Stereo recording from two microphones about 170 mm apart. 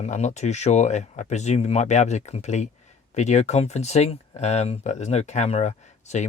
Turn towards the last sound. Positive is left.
turn(degrees=40)  # may be behind; listen again after turning